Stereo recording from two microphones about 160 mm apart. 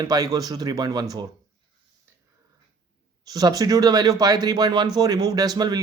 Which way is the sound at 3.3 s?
25° right (ahead or behind).